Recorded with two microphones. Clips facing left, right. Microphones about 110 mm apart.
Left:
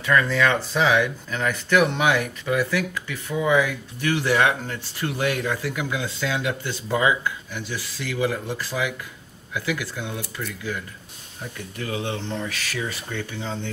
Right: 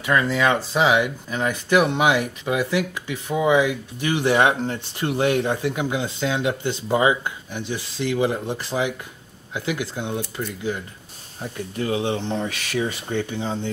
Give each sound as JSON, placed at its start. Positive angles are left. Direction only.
{"t": 0.0, "sound": "speech", "side_deg": -15}